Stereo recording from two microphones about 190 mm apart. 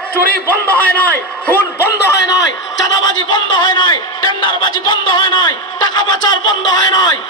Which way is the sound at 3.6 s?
20° left (ahead or behind).